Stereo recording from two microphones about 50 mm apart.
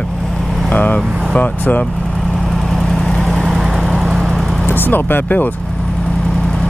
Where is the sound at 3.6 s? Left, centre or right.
Centre.